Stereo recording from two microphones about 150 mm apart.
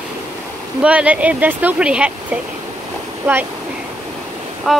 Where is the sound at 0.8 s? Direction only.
10° right (ahead or behind).